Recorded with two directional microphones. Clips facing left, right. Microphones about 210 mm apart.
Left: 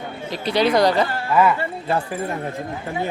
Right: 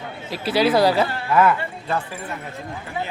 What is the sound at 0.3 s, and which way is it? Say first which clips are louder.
Speech: even; 5° right (ahead or behind).